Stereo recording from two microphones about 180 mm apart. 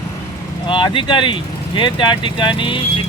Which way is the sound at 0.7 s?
25° left (ahead or behind).